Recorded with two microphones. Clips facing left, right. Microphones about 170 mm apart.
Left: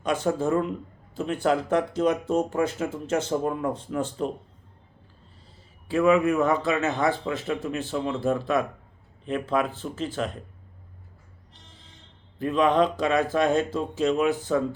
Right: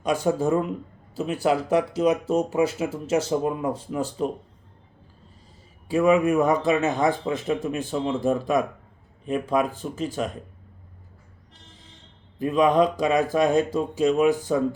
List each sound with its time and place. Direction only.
0.0 s speech: 10° right (ahead or behind)
5.9 s speech: 15° right (ahead or behind)
12.4 s speech: 10° right (ahead or behind)